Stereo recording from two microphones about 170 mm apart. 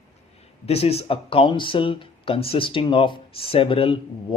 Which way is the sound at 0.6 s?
35° left (ahead or behind).